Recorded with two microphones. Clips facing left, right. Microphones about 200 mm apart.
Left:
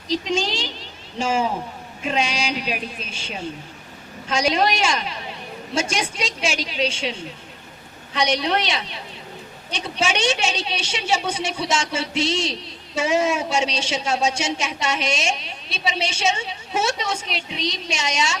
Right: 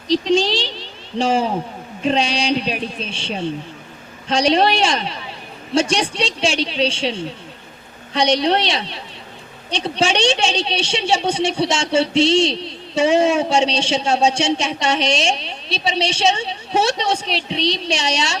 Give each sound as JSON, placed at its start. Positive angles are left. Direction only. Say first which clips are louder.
{"t": 0.1, "sound": "a sound", "louder": "right 7 dB", "side_deg": -35}
{"t": 2.0, "sound": "a woman's voice", "louder": "right 6 dB", "side_deg": -35}
{"t": 8.1, "sound": "a woman's voice", "louder": "right 5 dB", "side_deg": -30}
{"t": 10.0, "sound": "a woman's voice", "louder": "right 4 dB", "side_deg": -30}